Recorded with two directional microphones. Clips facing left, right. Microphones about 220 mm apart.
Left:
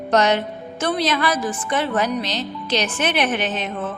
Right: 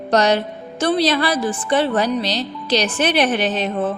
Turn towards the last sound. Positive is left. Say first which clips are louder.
# right 4 dB
turn(degrees=-35)  # may be behind; listen again after turning